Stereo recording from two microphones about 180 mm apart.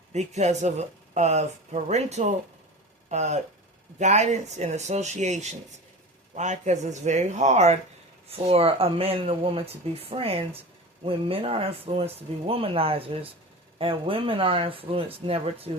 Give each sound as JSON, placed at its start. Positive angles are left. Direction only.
{"t": 0.1, "sound": "speech", "side_deg": -40}